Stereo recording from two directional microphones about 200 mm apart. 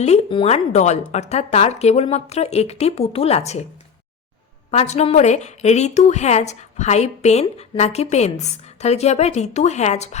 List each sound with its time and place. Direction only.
0.0 s a woman's voice: 30° left (ahead or behind)
4.7 s a woman's voice: 30° left (ahead or behind)